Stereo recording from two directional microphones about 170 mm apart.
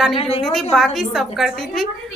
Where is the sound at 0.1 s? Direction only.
35° left (ahead or behind).